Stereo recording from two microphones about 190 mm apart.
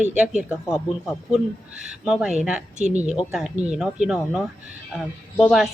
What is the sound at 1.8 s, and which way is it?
Speech, 5° right (ahead or behind).